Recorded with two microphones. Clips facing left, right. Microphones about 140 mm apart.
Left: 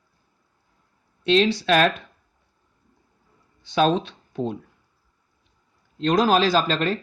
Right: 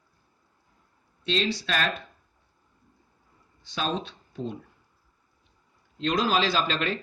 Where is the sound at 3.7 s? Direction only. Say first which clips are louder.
Left 10 dB; 65° left (ahead or behind).